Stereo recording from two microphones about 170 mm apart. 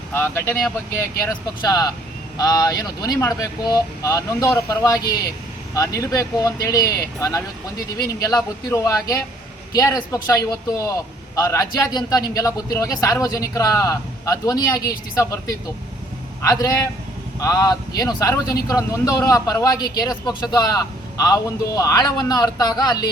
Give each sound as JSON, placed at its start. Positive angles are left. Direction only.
{"t": 0.1, "sound": "speech", "side_deg": 15}
{"t": 8.7, "sound": "speech", "side_deg": 20}